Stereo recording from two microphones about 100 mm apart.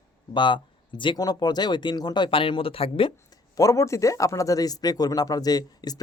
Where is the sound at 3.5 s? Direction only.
35° left (ahead or behind).